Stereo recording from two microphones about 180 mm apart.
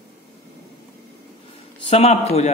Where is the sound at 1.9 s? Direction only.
35° left (ahead or behind).